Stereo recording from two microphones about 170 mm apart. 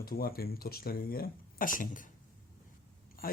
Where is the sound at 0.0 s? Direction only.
60° left (ahead or behind).